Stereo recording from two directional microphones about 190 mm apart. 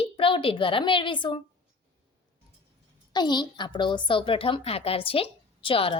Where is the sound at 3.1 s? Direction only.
25° left (ahead or behind).